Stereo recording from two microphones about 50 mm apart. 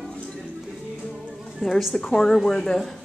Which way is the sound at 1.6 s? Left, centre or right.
Centre.